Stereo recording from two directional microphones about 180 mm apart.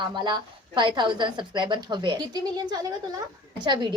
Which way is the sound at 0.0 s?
25° right (ahead or behind).